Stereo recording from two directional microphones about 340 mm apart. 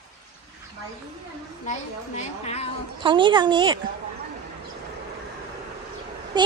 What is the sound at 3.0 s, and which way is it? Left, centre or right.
Speech, centre.